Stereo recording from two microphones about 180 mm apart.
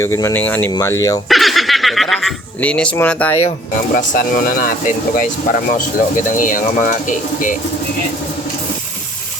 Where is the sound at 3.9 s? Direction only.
50° left (ahead or behind).